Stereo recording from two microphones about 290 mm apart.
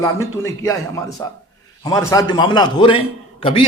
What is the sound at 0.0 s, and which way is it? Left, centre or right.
Speech, centre.